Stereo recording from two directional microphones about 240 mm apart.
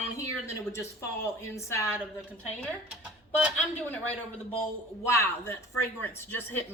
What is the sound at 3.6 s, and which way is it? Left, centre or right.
A woman's voice, centre.